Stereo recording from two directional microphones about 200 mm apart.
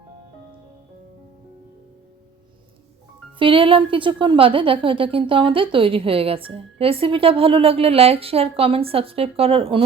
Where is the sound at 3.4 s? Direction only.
25° right (ahead or behind).